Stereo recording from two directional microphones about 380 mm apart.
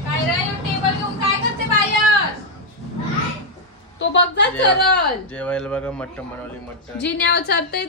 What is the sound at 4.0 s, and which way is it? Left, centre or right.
A woman's voice, left.